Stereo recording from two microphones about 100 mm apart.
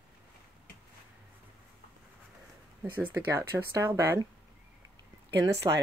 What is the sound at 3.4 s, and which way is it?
Speech, 25° right (ahead or behind).